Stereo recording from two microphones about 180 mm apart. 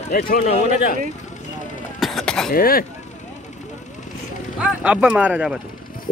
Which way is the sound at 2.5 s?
55° left (ahead or behind).